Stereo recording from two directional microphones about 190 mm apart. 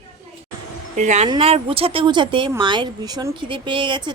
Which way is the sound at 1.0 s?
40° right (ahead or behind).